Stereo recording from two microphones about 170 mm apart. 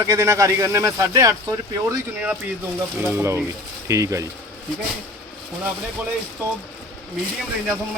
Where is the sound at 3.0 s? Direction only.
15° right (ahead or behind).